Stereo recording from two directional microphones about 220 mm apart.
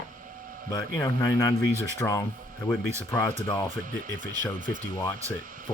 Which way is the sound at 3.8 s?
40° right (ahead or behind).